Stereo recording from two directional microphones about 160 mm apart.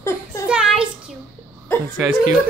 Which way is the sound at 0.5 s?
5° right (ahead or behind).